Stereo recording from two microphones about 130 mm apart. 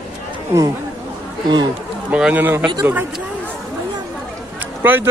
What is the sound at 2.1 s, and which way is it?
Speech, 10° right (ahead or behind).